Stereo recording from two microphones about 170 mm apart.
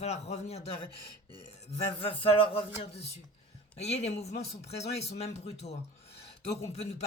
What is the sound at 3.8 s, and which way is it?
Speech, 40° left (ahead or behind).